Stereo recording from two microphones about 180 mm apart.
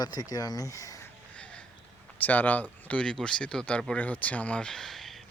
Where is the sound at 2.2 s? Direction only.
10° left (ahead or behind).